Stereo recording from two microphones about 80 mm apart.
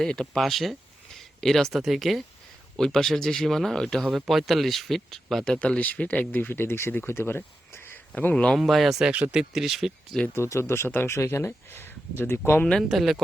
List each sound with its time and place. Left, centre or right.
0.0 s speech: centre
1.2 s a sound: centre
1.7 s speech: centre
5.5 s speech: centre
8.5 s speech: centre
10.3 s speech: left
12.9 s speech: centre